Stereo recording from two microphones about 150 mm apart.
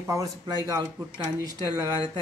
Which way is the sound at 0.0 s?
20° right (ahead or behind).